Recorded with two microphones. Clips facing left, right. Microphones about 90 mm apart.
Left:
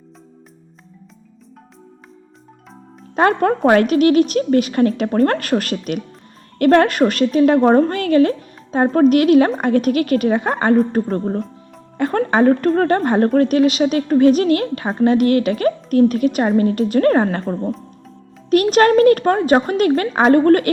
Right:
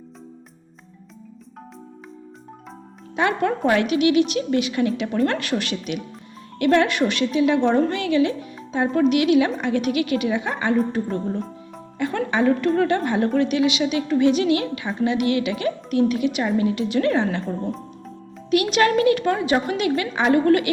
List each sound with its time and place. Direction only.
3.2 s a woman's voice: 45° left (ahead or behind)